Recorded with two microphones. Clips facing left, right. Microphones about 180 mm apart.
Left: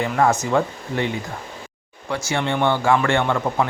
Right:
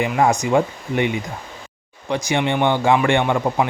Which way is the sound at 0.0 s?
15° right (ahead or behind).